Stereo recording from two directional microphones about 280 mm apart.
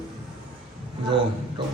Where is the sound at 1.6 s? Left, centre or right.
Centre.